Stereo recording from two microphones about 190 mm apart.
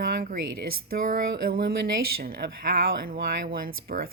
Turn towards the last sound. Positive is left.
turn(degrees=-50)  # may be behind; listen again after turning